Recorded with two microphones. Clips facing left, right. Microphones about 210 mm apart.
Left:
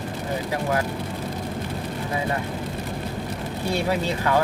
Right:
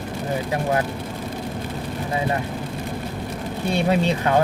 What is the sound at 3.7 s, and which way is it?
Speech, 20° right (ahead or behind).